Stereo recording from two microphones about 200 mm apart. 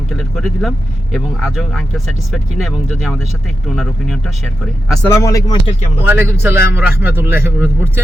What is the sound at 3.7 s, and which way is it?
Speech, centre (ahead or behind).